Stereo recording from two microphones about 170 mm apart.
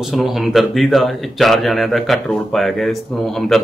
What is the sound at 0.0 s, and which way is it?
Speech, centre (ahead or behind).